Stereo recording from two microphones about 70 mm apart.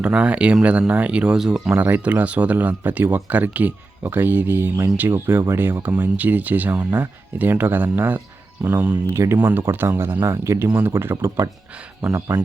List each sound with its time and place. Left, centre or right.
0.0 s speech: centre
1.7 s speech: right
9.1 s speech: right
10.2 s speech: right
10.7 s speech: right
12.0 s speech: centre